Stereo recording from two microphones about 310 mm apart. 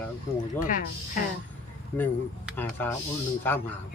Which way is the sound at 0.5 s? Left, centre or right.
Left.